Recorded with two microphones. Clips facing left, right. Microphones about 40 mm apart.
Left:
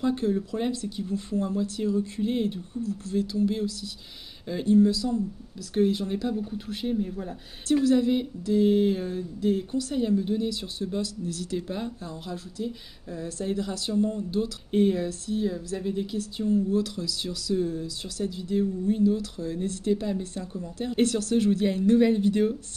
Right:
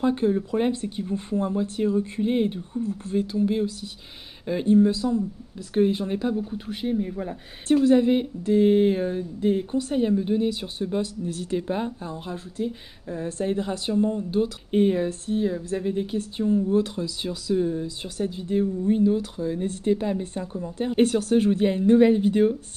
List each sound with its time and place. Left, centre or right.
0.0 s speech: right
7.0 s speech: right